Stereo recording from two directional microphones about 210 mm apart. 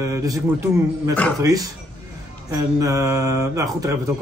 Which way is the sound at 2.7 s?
15° right (ahead or behind).